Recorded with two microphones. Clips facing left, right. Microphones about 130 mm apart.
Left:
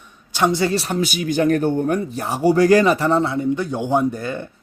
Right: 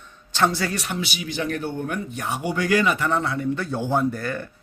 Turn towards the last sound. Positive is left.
turn(degrees=20)  # may be behind; listen again after turning